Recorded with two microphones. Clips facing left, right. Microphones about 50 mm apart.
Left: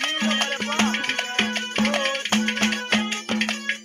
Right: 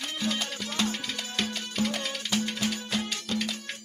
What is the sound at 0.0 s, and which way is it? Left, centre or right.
Music, left.